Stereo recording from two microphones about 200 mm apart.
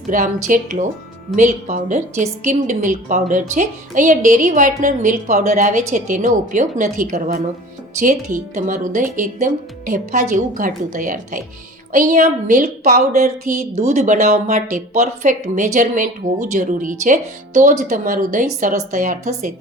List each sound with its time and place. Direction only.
0.1 s a woman's voice: 40° right (ahead or behind)